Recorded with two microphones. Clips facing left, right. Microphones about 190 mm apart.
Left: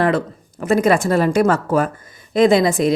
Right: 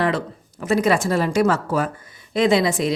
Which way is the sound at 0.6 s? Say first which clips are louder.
Left 3 dB; 55° left (ahead or behind).